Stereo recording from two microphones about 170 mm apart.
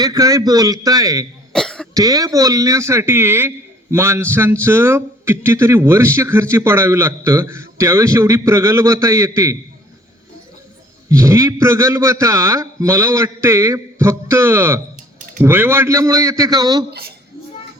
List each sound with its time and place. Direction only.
0.0 s speech: 20° right (ahead or behind)
1.5 s cough: 5° left (ahead or behind)
1.9 s a man's voice: 20° right (ahead or behind)
11.1 s a man's voice: 20° right (ahead or behind)
16.9 s speech: 70° right (ahead or behind)